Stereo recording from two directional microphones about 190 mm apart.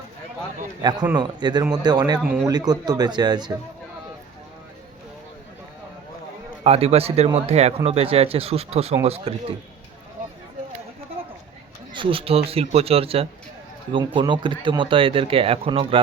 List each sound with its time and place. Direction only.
0.8 s a man's voice: 20° right (ahead or behind)
2.2 s speech: 5° right (ahead or behind)
2.5 s speech: 20° right (ahead or behind)
6.7 s speech: 30° right (ahead or behind)
11.9 s speech: 30° right (ahead or behind)